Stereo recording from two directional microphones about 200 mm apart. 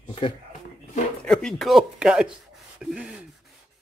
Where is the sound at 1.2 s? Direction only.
5° left (ahead or behind).